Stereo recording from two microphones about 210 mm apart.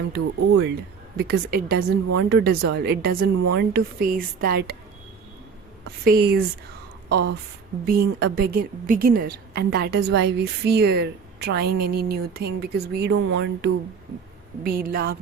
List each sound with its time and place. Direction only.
0.6 s a woman's voice: 50° right (ahead or behind)
5.8 s a woman's voice: 50° right (ahead or behind)
14.6 s a woman's voice: 45° right (ahead or behind)